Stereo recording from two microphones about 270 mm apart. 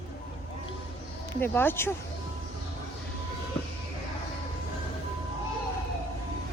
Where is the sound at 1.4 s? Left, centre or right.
Centre.